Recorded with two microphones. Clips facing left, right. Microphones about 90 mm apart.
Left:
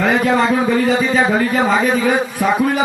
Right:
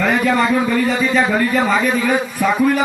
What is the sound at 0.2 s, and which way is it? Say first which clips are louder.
A man's voice: left 1 dB; 25° left (ahead or behind).